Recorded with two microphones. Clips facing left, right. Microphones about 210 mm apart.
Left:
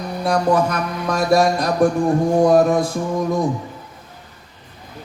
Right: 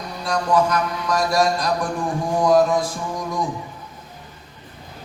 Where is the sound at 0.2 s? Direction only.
55° left (ahead or behind).